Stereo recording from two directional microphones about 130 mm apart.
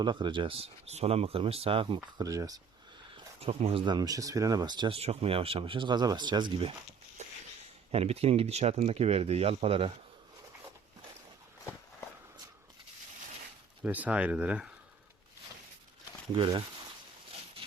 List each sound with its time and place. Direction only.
0.0 s speech: 35° right (ahead or behind)
2.1 s speech: 25° right (ahead or behind)
3.4 s speech: 50° right (ahead or behind)
4.9 s speech: 50° right (ahead or behind)
7.2 s a sound: 60° right (ahead or behind)
7.9 s speech: 50° right (ahead or behind)
13.8 s speech: 10° right (ahead or behind)
16.3 s speech: 40° right (ahead or behind)